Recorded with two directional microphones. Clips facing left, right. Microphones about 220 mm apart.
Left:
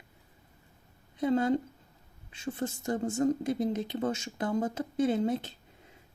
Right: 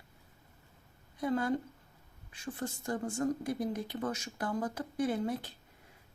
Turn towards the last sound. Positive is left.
turn(degrees=25)  # may be behind; listen again after turning